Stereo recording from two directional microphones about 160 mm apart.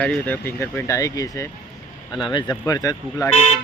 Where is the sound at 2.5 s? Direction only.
15° left (ahead or behind).